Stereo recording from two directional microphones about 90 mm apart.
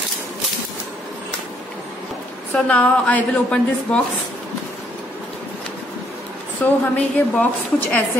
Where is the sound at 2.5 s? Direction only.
15° left (ahead or behind).